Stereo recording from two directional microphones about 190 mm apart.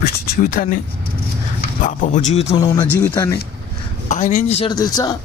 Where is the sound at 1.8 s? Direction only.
40° left (ahead or behind).